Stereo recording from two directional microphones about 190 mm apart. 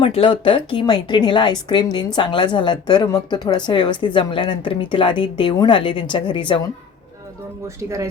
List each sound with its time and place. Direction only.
0.0 s a woman's voice: 30° left (ahead or behind)
7.8 s speech: 15° right (ahead or behind)